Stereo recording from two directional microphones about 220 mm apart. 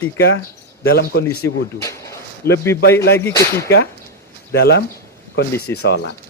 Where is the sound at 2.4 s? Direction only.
45° left (ahead or behind).